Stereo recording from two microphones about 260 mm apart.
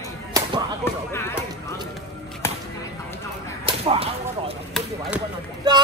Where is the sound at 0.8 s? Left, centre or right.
Centre.